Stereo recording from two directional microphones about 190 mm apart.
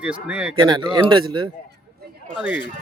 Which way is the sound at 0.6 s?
20° right (ahead or behind).